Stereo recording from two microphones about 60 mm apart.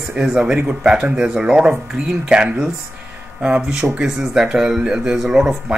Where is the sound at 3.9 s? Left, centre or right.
Centre.